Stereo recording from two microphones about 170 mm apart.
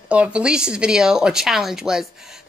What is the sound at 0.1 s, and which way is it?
Speech, 5° right (ahead or behind).